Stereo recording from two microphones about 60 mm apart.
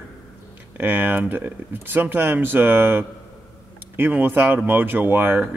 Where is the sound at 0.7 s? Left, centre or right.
Right.